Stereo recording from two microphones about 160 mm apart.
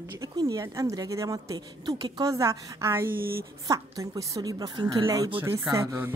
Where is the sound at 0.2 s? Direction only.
20° right (ahead or behind).